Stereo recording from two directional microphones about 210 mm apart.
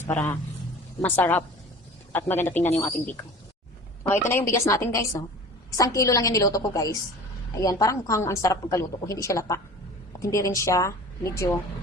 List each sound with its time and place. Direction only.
0.0 s a woman's voice: 10° left (ahead or behind)
4.3 s a woman's voice: 10° left (ahead or behind)